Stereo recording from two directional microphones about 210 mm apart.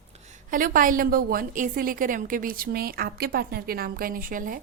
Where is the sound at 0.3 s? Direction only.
40° right (ahead or behind).